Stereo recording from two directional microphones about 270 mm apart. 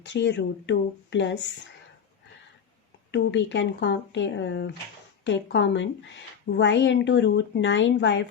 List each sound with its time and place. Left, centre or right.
0.0 s a woman's voice: left
3.1 s a woman's voice: left